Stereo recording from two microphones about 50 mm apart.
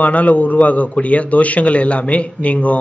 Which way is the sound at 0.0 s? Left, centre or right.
Left.